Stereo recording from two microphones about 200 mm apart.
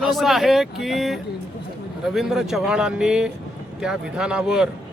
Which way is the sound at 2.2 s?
Centre (ahead or behind).